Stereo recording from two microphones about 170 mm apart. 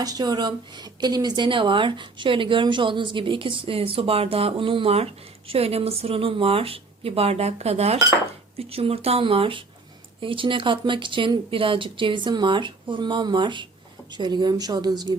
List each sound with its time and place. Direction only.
0.0 s speech: 20° right (ahead or behind)